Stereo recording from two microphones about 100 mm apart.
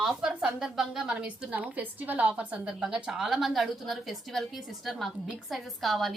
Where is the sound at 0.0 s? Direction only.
5° right (ahead or behind).